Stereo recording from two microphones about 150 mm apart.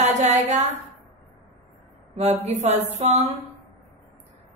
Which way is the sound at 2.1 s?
45° right (ahead or behind).